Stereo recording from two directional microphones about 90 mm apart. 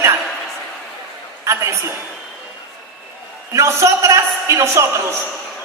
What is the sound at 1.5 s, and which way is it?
Speech, 35° right (ahead or behind).